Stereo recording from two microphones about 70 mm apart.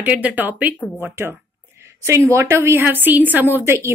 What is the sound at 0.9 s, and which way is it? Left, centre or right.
A woman's voice, right.